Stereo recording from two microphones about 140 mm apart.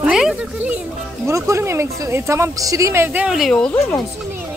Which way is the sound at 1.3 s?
20° right (ahead or behind).